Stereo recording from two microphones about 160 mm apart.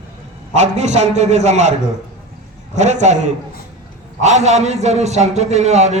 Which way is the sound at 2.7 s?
45° right (ahead or behind).